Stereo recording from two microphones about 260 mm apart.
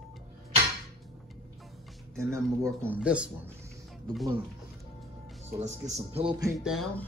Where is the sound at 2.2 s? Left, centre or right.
Centre.